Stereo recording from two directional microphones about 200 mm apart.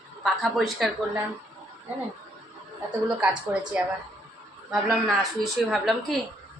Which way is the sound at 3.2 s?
5° right (ahead or behind).